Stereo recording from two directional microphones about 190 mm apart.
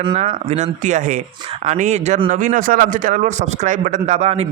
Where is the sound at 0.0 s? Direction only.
30° right (ahead or behind).